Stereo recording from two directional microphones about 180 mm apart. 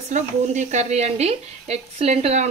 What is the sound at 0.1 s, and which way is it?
A woman's voice, 40° right (ahead or behind).